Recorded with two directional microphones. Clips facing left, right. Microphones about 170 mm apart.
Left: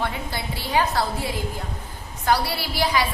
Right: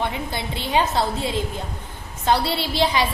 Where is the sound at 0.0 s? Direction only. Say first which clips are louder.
Right 2 dB; 20° right (ahead or behind).